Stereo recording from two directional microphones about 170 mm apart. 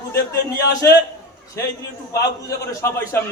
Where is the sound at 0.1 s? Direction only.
20° left (ahead or behind).